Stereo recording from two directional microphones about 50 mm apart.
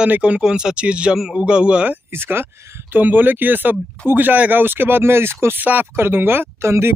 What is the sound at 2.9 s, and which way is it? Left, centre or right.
Speech, right.